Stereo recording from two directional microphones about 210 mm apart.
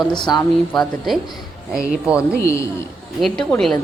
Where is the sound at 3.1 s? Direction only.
Centre (ahead or behind).